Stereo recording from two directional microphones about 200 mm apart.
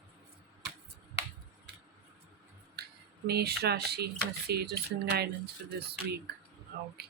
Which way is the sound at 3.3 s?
55° right (ahead or behind).